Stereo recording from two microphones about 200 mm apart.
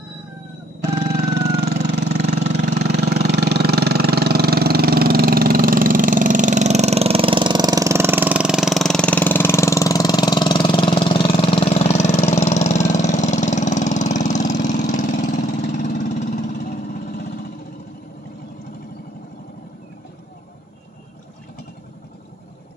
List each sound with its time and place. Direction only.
2.0 s vehicle: 35° right (ahead or behind)
2.6 s engine: 55° right (ahead or behind); by 16.2 s 40° left (ahead or behind)
16.2 s vehicle: 40° left (ahead or behind)